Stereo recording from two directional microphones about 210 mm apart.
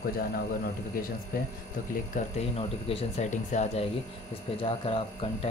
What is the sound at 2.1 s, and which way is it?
Speech, 35° left (ahead or behind).